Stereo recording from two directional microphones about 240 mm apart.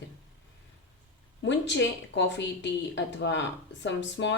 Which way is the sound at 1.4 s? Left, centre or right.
Left.